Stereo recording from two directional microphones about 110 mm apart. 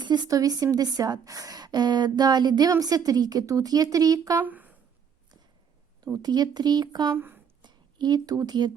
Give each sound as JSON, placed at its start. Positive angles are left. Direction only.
{"t": 0.0, "sound": "a woman's voice", "side_deg": -40}
{"t": 4.4, "sound": "a sound", "side_deg": -15}
{"t": 6.2, "sound": "a woman's voice", "side_deg": -40}
{"t": 7.1, "sound": "speech", "side_deg": -20}
{"t": 7.6, "sound": "speech", "side_deg": -45}